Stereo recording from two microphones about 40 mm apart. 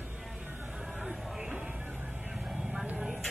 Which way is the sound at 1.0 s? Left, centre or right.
Centre.